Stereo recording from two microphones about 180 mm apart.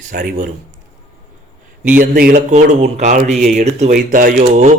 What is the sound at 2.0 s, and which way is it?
Speech, 50° right (ahead or behind).